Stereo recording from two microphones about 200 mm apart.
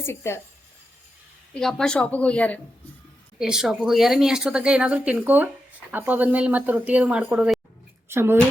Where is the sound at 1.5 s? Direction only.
5° left (ahead or behind).